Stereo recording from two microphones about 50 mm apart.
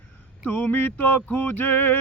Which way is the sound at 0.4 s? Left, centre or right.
Left.